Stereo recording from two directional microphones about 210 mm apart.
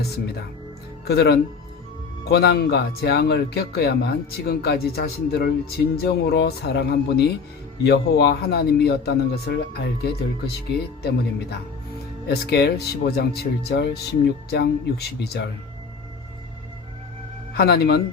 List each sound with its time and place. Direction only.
1.0 s speech: 50° left (ahead or behind)
12.3 s speech: 50° left (ahead or behind)
17.5 s speech: 50° left (ahead or behind)